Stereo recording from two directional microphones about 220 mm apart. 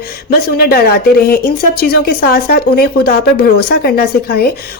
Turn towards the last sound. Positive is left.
turn(degrees=45)  # may be behind; listen again after turning